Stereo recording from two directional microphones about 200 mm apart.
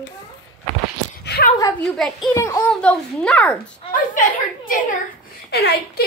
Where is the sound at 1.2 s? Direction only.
50° left (ahead or behind).